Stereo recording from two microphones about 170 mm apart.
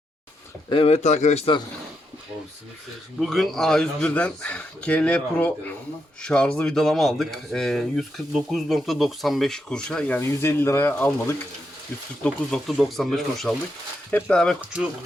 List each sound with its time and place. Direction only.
0.7 s a man's voice: 35° left (ahead or behind)
3.2 s speech: centre (ahead or behind)